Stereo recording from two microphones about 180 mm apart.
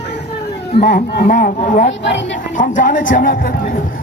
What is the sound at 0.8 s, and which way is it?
A man's voice, 60° left (ahead or behind).